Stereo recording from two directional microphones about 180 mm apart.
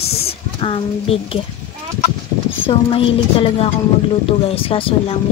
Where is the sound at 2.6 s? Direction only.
30° left (ahead or behind).